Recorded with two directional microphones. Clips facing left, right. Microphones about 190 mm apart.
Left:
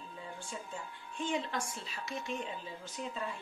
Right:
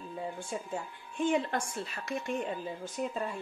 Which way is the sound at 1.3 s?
55° right (ahead or behind).